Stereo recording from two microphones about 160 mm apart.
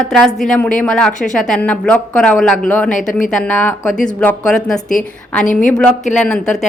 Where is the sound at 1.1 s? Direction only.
50° left (ahead or behind).